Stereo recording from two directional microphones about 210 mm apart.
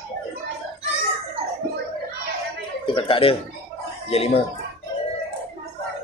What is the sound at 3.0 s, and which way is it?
Speech, 25° left (ahead or behind).